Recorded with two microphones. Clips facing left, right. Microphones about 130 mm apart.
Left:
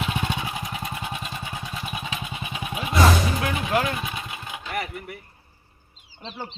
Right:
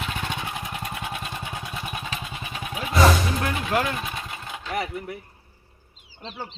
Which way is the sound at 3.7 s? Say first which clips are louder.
Left 1 dB; centre (ahead or behind).